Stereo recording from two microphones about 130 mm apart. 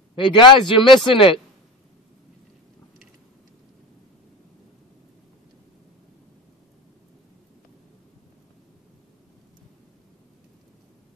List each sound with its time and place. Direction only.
0.1 s a man's voice: 40° left (ahead or behind)